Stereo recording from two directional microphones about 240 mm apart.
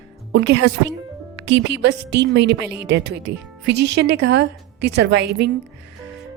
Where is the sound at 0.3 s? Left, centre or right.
Right.